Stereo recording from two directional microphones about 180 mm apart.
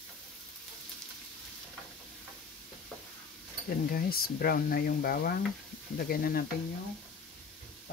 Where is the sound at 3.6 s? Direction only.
55° left (ahead or behind).